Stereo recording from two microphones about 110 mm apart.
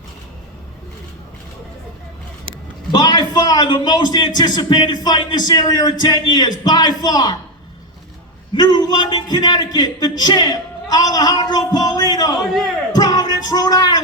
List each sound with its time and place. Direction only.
2.9 s speech: 40° left (ahead or behind)
8.5 s speech: 40° left (ahead or behind)
12.4 s a man's voice: centre (ahead or behind)
13.0 s child singing: 35° left (ahead or behind)